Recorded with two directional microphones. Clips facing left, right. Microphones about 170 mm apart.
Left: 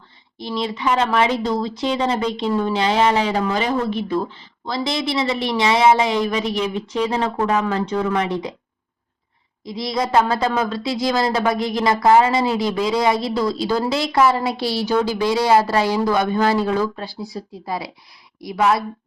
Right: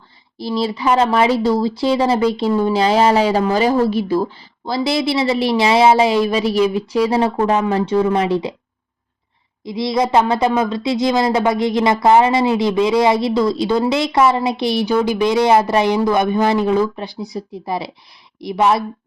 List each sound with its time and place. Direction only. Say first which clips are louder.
0.3 s a woman's voice: right 4 dB; 35° right (ahead or behind)
9.6 s a woman's voice: right 5 dB; 25° right (ahead or behind)
14.1 s a woman's voice: right 2 dB; 25° right (ahead or behind)